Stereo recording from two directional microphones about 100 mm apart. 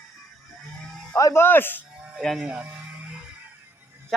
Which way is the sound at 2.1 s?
Centre (ahead or behind).